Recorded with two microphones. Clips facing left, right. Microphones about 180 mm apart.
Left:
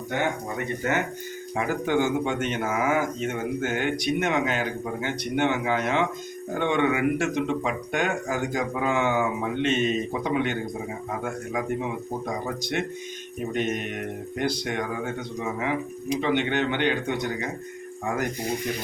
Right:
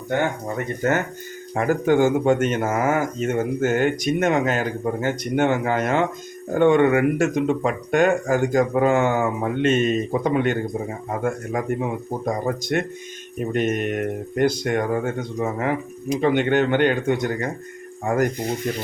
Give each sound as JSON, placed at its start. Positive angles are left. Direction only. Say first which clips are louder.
{"t": 0.1, "sound": "speech", "louder": "right 5 dB", "side_deg": -45}
{"t": 12.2, "sound": "speech", "louder": "right 6 dB", "side_deg": -50}